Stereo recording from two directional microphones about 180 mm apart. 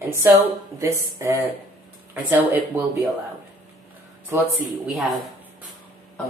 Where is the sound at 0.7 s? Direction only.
15° right (ahead or behind).